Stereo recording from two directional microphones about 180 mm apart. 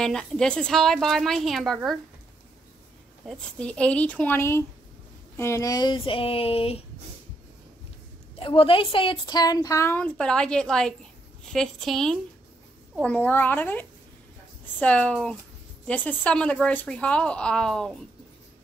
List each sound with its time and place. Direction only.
0.0 s a woman's voice: centre (ahead or behind)
3.3 s speech: 5° left (ahead or behind); by 6.8 s 30° left (ahead or behind)
8.4 s a woman's voice: 30° left (ahead or behind); by 17.9 s 5° left (ahead or behind)